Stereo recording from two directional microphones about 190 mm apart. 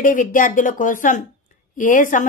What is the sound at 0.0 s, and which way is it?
A woman's voice, 45° left (ahead or behind).